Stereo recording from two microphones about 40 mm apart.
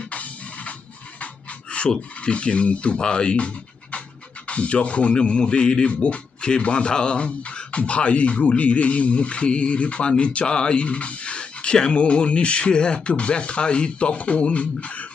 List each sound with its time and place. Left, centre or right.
0.0 s music: left
1.2 s pant: left
1.9 s speech: left